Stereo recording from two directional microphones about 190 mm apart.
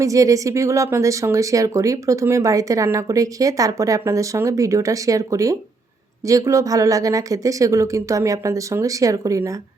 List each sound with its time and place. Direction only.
0.0 s speech: 15° right (ahead or behind)